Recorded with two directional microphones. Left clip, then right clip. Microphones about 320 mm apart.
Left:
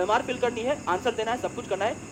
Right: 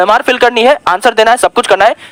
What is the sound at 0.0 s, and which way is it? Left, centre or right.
Speech, right.